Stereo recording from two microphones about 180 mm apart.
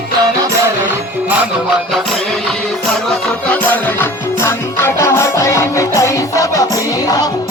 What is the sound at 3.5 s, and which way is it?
Music, 10° left (ahead or behind).